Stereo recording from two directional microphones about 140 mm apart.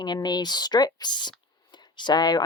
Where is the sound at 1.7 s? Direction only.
30° left (ahead or behind).